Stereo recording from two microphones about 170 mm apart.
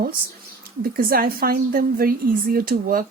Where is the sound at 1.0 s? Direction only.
60° right (ahead or behind).